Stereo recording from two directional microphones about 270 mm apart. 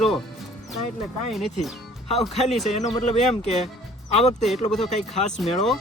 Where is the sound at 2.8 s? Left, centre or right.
Left.